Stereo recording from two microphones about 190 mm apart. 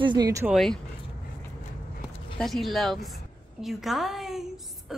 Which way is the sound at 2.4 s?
Centre (ahead or behind).